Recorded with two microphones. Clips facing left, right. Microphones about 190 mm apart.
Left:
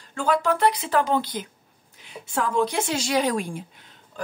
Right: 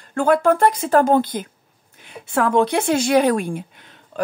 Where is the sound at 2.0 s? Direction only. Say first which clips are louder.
Right 6 dB; 60° right (ahead or behind).